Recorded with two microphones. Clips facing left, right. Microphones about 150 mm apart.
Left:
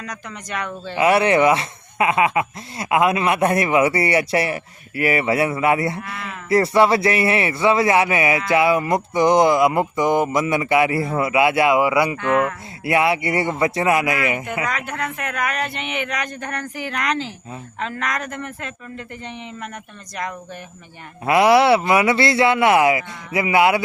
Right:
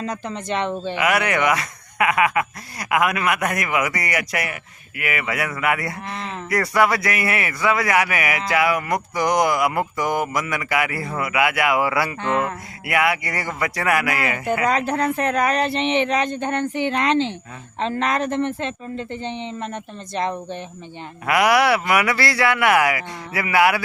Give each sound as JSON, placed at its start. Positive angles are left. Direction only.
{"t": 0.0, "sound": "a woman's voice", "side_deg": -30}
{"t": 0.9, "sound": "speech", "side_deg": 30}
{"t": 6.0, "sound": "a woman's voice", "side_deg": -25}
{"t": 6.5, "sound": "speech", "side_deg": 25}
{"t": 12.1, "sound": "a woman's voice", "side_deg": -25}
{"t": 12.8, "sound": "speech", "side_deg": 25}
{"t": 14.6, "sound": "a woman's voice", "side_deg": -30}
{"t": 21.2, "sound": "speech", "side_deg": 25}